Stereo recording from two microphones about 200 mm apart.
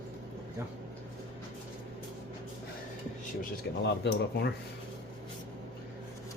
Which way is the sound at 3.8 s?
60° left (ahead or behind).